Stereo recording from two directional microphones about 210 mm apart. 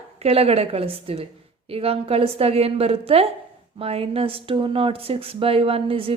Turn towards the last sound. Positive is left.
turn(degrees=-25)  # may be behind; listen again after turning